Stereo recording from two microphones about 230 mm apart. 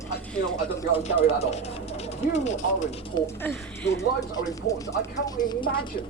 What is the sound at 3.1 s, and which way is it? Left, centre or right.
Speech, centre.